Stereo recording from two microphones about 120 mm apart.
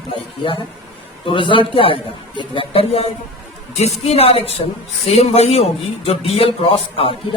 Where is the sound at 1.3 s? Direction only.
45° left (ahead or behind).